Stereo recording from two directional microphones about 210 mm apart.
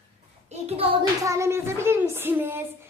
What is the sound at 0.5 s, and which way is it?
Speech, 30° right (ahead or behind).